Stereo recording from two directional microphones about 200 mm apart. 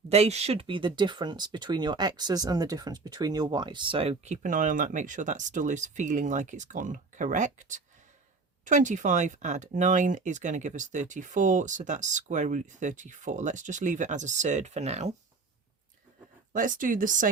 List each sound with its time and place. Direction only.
0.1 s speech: 30° right (ahead or behind)
16.5 s speech: 40° right (ahead or behind)